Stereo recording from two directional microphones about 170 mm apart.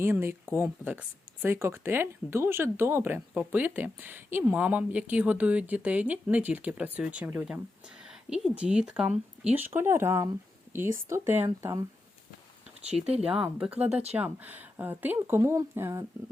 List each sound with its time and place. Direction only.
0.0 s speech: 15° right (ahead or behind)
13.4 s speech: 5° right (ahead or behind)
13.9 s speech: 40° right (ahead or behind)
14.2 s speech: 10° right (ahead or behind)